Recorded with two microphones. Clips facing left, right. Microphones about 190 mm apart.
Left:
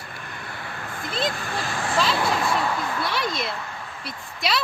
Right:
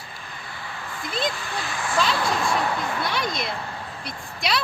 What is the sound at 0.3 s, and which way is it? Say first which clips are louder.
Vehicle: left 1 dB; 60° left (ahead or behind).